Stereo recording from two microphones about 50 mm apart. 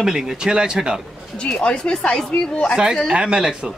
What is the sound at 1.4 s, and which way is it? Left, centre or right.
A woman's voice, centre.